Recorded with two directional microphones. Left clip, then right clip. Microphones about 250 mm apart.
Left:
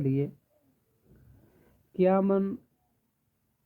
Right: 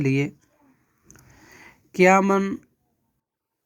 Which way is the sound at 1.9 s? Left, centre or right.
Right.